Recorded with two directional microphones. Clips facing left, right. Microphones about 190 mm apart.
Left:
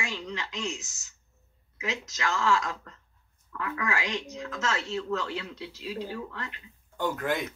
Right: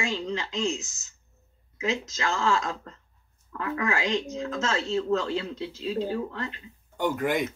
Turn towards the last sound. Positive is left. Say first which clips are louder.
# right 4 dB
turn(degrees=-15)  # may be behind; listen again after turning